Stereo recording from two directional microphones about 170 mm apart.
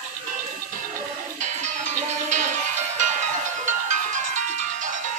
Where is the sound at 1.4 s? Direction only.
45° right (ahead or behind).